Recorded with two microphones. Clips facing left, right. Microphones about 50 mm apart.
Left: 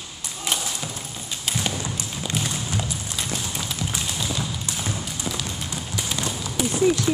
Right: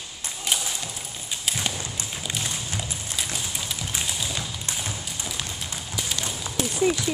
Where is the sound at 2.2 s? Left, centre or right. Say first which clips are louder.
Left 4 dB; centre.